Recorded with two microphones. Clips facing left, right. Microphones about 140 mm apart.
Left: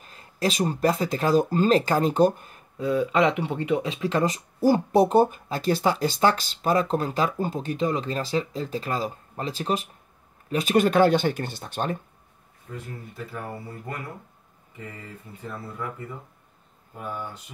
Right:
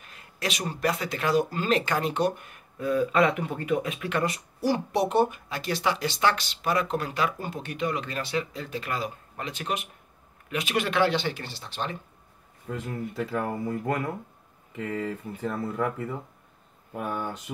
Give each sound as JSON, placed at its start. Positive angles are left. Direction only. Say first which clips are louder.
{"t": 0.0, "sound": "speech", "louder": "left 6 dB", "side_deg": 35}
{"t": 2.8, "sound": "speech", "louder": "left 1 dB", "side_deg": 20}
{"t": 4.6, "sound": "speech", "louder": "left 6 dB", "side_deg": 45}
{"t": 12.7, "sound": "speech", "louder": "right 6 dB", "side_deg": -90}
{"t": 16.9, "sound": "speech", "louder": "right 3 dB", "side_deg": -75}